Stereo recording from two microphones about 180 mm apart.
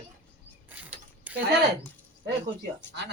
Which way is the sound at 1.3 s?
10° right (ahead or behind).